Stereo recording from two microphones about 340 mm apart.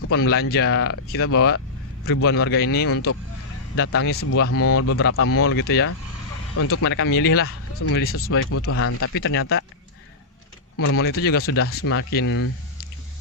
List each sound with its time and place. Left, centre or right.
0.2 s speech: left
2.9 s speech: left
3.9 s speech: left
4.4 s speech: left
6.6 s speech: left
10.8 s speech: left